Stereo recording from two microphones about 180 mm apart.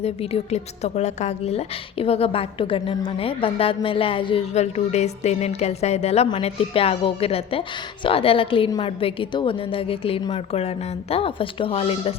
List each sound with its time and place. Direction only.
0.0 s a woman's voice: 35° left (ahead or behind)